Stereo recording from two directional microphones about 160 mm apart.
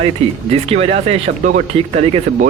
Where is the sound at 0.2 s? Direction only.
40° right (ahead or behind).